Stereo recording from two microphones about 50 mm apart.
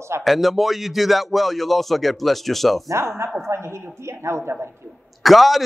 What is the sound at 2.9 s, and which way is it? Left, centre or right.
Speech, right.